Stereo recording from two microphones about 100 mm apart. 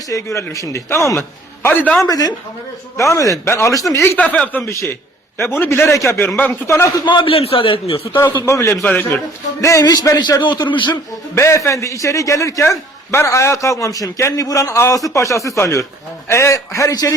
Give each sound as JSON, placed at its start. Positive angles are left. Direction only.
{"t": 0.1, "sound": "a man's voice", "side_deg": 30}
{"t": 2.0, "sound": "a man's voice", "side_deg": 40}
{"t": 4.0, "sound": "a man's voice", "side_deg": 20}
{"t": 6.7, "sound": "a man's voice", "side_deg": 30}
{"t": 7.0, "sound": "a man's voice", "side_deg": 50}
{"t": 7.3, "sound": "a man's voice", "side_deg": 70}
{"t": 8.4, "sound": "a man's voice", "side_deg": 30}
{"t": 8.8, "sound": "speech", "side_deg": 15}
{"t": 9.6, "sound": "a man's voice", "side_deg": 30}
{"t": 11.3, "sound": "a man's voice", "side_deg": 30}